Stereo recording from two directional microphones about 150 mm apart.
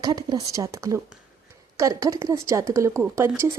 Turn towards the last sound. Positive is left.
turn(degrees=-20)  # may be behind; listen again after turning